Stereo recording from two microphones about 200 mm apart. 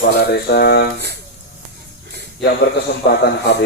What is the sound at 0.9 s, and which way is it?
Speech, 55° right (ahead or behind).